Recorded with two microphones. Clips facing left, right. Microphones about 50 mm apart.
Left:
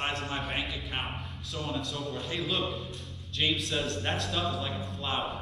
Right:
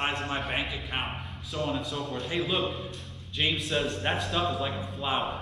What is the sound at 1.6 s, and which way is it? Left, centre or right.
A man's voice, centre.